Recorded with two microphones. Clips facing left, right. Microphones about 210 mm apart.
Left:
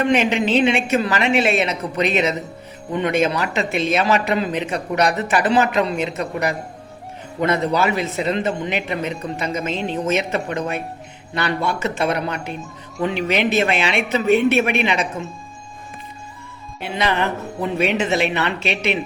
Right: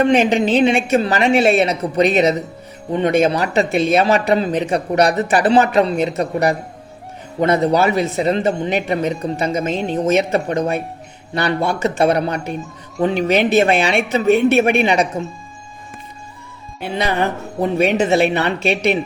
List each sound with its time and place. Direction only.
0.0 s a woman's voice: 35° right (ahead or behind)
7.3 s a woman's voice: 35° right (ahead or behind)
17.0 s a woman's voice: 45° right (ahead or behind)